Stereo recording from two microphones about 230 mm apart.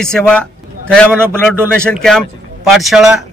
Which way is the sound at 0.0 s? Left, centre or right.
Centre.